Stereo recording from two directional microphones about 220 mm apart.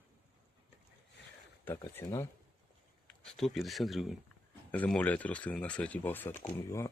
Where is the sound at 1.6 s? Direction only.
10° left (ahead or behind).